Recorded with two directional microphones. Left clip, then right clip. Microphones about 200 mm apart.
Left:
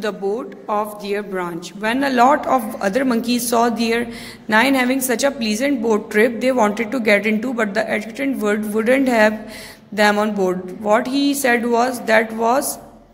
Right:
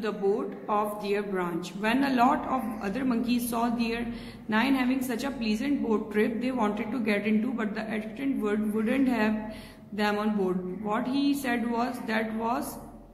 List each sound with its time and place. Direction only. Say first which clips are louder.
0.7 s a woman's voice: left 7 dB; 40° left (ahead or behind)